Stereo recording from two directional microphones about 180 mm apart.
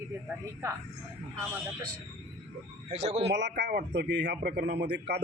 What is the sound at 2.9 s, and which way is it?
Speech, 35° right (ahead or behind).